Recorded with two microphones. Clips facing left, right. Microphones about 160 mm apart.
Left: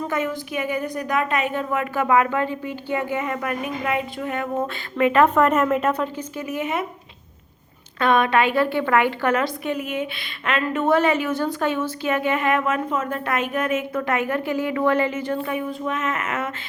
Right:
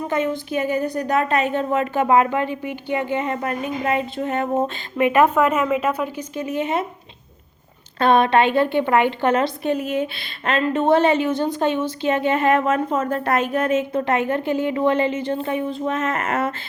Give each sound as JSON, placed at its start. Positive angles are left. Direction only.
{"t": 0.1, "sound": "a woman's voice", "side_deg": -25}
{"t": 5.1, "sound": "a woman's voice", "side_deg": -5}
{"t": 6.1, "sound": "a woman's voice", "side_deg": -20}
{"t": 7.9, "sound": "a woman's voice", "side_deg": -30}